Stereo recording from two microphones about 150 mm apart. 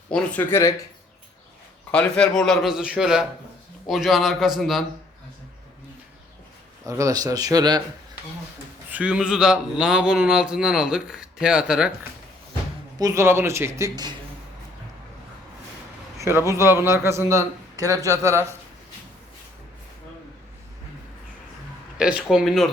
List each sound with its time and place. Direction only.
0.1 s speech: 10° left (ahead or behind)
1.9 s speech: 5° left (ahead or behind)
6.8 s speech: 20° right (ahead or behind)
8.9 s speech: 10° right (ahead or behind)
13.0 s speech: 20° right (ahead or behind)
16.1 s a sound: 20° right (ahead or behind)
16.5 s speech: 15° right (ahead or behind)
21.9 s speech: 5° right (ahead or behind)